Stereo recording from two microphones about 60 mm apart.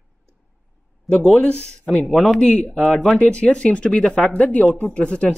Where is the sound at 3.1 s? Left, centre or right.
Centre.